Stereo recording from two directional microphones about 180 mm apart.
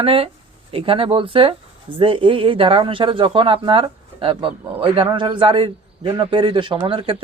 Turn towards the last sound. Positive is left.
turn(degrees=-30)  # may be behind; listen again after turning